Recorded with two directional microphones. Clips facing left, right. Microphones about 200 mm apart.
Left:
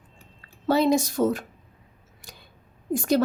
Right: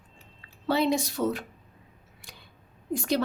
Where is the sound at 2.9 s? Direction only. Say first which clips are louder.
Left 5 dB; 45° left (ahead or behind).